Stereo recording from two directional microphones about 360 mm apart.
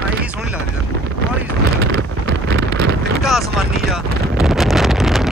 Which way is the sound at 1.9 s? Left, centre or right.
Right.